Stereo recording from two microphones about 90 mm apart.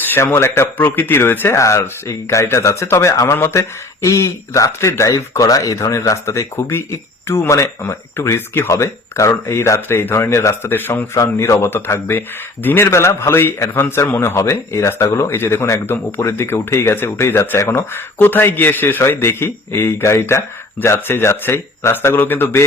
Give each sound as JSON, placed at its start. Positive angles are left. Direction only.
{"t": 0.0, "sound": "speech", "side_deg": 20}
{"t": 11.2, "sound": "speech", "side_deg": 35}